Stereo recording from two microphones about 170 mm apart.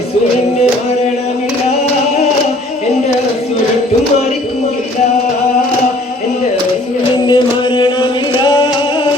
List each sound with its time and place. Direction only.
7.3 s chant: 25° left (ahead or behind)